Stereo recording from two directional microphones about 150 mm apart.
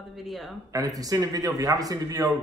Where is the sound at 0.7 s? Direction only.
25° right (ahead or behind).